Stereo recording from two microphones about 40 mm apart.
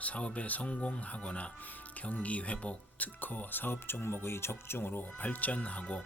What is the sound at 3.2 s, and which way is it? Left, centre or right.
Speech, left.